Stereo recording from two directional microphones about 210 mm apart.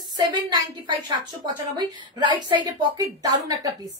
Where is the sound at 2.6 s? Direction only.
20° right (ahead or behind).